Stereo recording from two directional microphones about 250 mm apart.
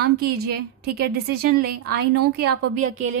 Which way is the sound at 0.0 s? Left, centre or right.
Right.